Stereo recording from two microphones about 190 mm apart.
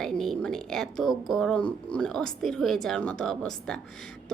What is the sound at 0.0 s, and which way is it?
A woman's voice, centre (ahead or behind).